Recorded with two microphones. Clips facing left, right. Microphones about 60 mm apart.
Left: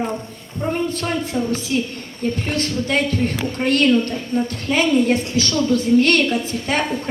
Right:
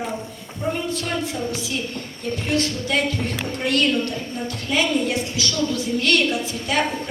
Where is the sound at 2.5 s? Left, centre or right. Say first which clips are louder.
Right 1 dB; left.